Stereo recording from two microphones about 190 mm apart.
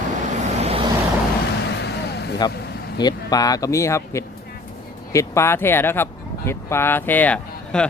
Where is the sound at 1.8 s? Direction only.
60° left (ahead or behind).